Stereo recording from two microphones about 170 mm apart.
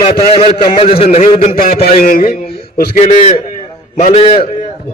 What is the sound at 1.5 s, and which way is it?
Speech, 60° left (ahead or behind).